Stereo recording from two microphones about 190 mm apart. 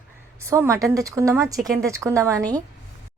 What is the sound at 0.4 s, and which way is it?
A woman's voice, 15° right (ahead or behind).